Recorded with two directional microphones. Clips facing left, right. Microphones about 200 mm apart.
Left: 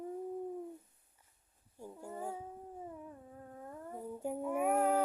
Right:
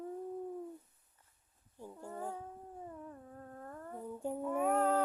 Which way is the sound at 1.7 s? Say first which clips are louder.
Even; 10° left (ahead or behind).